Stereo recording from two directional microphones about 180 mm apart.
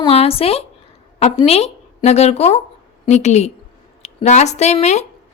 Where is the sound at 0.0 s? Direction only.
35° left (ahead or behind).